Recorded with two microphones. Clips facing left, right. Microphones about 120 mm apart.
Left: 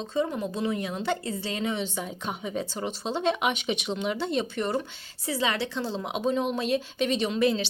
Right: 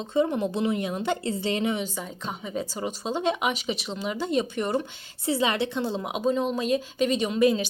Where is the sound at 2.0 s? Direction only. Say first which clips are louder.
Left 1 dB; 5° left (ahead or behind); by 6.0 s 20° right (ahead or behind).